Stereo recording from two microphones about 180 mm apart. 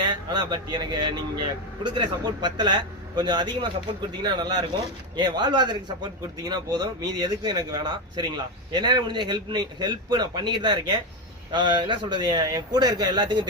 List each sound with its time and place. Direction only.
0.0 s speech: 25° right (ahead or behind)